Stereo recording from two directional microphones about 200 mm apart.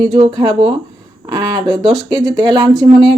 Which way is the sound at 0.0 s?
20° right (ahead or behind).